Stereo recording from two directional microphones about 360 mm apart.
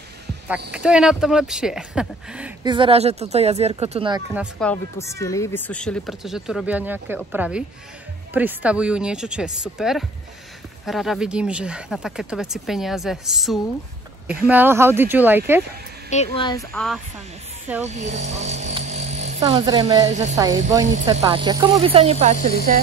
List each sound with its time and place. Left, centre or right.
0.5 s speech: centre
16.3 s speech: centre
17.8 s speech: centre